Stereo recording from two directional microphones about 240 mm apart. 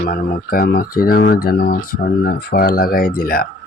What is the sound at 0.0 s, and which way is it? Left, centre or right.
Speech, left.